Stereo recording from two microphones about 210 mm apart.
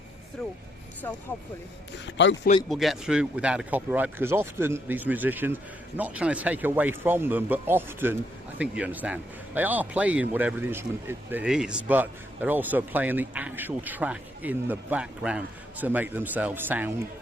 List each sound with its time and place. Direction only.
1.0 s speech: 10° left (ahead or behind)
2.0 s speech: 60° left (ahead or behind)
2.6 s speech: centre (ahead or behind)